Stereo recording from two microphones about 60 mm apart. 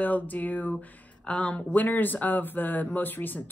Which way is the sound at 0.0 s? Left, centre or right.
Left.